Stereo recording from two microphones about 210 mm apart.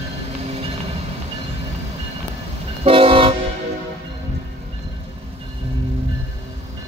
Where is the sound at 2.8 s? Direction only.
25° right (ahead or behind).